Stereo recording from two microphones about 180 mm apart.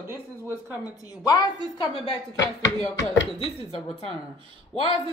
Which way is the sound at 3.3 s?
35° left (ahead or behind).